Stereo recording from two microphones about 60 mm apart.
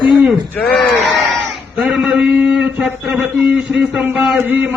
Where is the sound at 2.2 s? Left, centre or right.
Centre.